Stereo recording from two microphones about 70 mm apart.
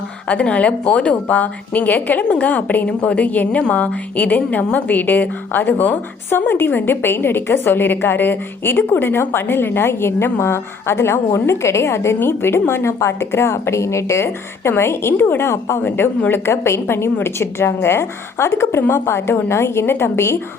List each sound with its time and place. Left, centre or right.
0.3 s a woman's voice: centre; by 15.8 s left
15.8 s a woman's voice: left